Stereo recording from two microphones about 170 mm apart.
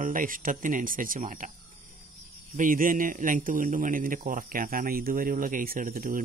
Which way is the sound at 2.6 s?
55° right (ahead or behind).